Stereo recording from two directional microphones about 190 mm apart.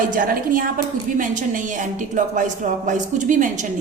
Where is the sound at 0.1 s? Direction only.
45° right (ahead or behind).